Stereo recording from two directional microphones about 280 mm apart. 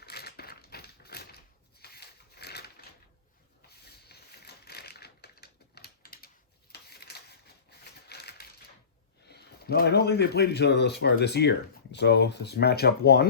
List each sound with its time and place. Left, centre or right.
0.0 s typewriter: left
1.8 s a sound: left
3.7 s typewriter: left
9.2 s speech: left